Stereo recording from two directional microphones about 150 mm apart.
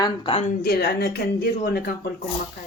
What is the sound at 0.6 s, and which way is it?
Speech, 90° left.